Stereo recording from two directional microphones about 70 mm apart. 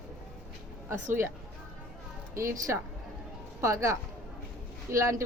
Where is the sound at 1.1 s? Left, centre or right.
Right.